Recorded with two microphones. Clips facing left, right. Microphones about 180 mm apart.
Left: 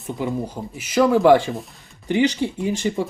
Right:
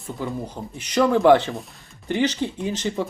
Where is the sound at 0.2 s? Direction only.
15° left (ahead or behind).